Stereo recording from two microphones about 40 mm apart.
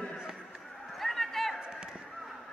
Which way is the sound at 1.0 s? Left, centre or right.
Centre.